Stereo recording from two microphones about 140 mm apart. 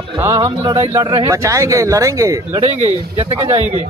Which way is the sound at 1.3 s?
20° right (ahead or behind).